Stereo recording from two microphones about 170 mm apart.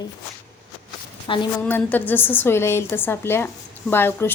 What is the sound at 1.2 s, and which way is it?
Speech, 30° left (ahead or behind).